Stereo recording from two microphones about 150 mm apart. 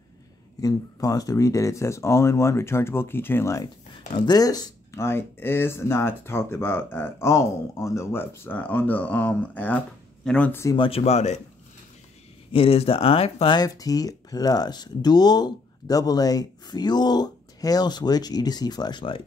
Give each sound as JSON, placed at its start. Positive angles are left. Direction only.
{"t": 0.6, "sound": "speech", "side_deg": 25}
{"t": 10.8, "sound": "speech", "side_deg": 40}
{"t": 12.5, "sound": "speech", "side_deg": 40}
{"t": 13.6, "sound": "speech", "side_deg": 25}